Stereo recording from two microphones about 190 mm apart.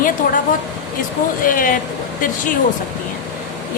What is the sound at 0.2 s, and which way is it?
Speech, 50° left (ahead or behind).